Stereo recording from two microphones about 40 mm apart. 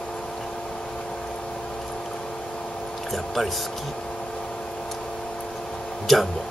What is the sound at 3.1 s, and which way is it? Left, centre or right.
Speech, centre.